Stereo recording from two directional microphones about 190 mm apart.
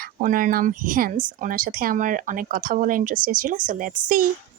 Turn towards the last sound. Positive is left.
turn(degrees=-45)  # may be behind; listen again after turning